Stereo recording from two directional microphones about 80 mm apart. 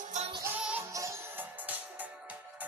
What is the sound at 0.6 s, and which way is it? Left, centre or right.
Music, centre.